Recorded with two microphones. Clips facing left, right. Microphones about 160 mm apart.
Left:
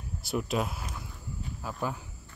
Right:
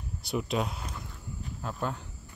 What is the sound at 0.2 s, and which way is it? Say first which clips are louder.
Speech: even; centre (ahead or behind).